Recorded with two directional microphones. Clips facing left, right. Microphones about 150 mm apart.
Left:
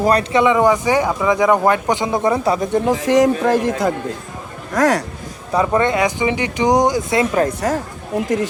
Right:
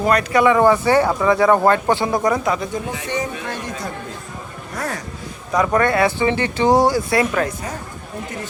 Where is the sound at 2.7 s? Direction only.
85° left.